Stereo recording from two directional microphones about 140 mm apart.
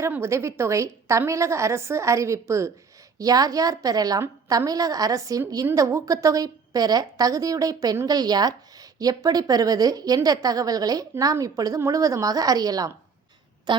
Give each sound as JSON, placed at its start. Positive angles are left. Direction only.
{"t": 0.0, "sound": "a woman's voice", "side_deg": -20}